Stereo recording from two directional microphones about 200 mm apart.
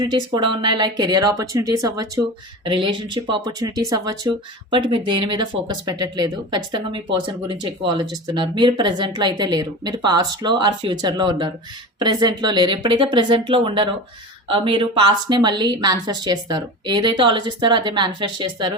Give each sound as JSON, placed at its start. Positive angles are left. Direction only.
{"t": 0.0, "sound": "speech", "side_deg": -20}